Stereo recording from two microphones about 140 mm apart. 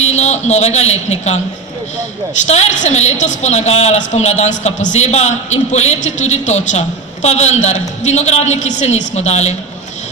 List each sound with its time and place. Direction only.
0.1 s a man's voice: 55° left (ahead or behind)
2.5 s a man's voice: 55° left (ahead or behind)